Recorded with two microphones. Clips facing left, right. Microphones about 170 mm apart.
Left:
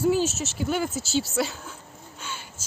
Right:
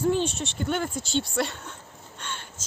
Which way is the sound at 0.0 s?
5° left (ahead or behind).